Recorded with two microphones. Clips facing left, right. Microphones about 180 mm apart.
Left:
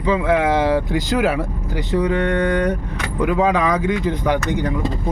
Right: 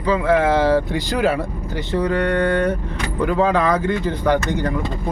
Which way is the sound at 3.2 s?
35° right (ahead or behind).